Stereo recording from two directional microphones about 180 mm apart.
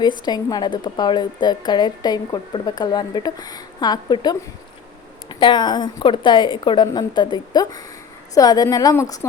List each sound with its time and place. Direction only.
0.0 s a woman's voice: 25° left (ahead or behind)